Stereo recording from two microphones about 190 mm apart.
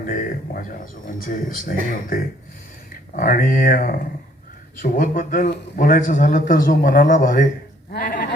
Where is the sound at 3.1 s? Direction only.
50° left (ahead or behind).